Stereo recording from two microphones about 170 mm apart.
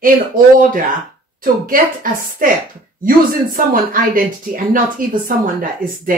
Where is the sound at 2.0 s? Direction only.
55° right (ahead or behind).